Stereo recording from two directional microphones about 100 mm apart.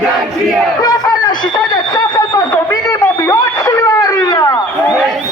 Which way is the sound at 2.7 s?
25° left (ahead or behind).